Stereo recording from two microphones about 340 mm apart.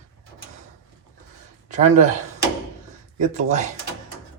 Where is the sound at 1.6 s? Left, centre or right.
Right.